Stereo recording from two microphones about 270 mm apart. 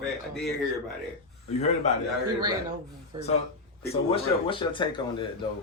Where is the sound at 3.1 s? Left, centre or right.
Centre.